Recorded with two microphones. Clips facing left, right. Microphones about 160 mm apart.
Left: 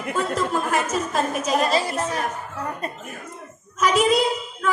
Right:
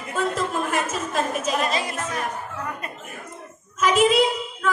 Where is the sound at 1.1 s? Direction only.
40° left (ahead or behind).